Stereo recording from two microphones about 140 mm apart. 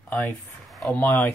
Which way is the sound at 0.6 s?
Centre (ahead or behind).